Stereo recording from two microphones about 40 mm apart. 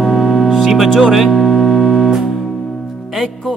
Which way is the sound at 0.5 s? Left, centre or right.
Centre.